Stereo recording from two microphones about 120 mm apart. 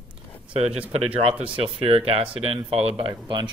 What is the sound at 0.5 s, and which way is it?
Speech, 60° right (ahead or behind).